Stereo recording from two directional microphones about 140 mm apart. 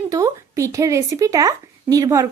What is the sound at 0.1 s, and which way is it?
Speech, 25° right (ahead or behind).